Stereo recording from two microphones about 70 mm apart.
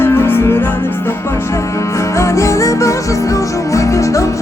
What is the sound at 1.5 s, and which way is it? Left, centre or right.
Music, left.